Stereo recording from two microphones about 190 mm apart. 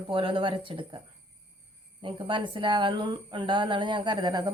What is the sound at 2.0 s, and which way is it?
A woman's voice, 25° right (ahead or behind).